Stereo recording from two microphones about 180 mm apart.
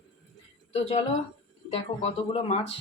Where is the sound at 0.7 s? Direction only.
35° left (ahead or behind).